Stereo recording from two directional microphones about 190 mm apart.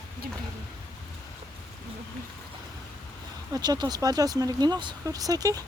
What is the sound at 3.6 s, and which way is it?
Speech, 20° right (ahead or behind).